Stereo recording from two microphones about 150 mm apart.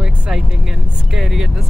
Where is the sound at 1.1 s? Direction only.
Centre (ahead or behind).